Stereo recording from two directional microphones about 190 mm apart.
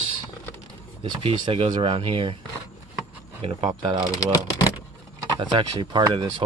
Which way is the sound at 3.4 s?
25° right (ahead or behind).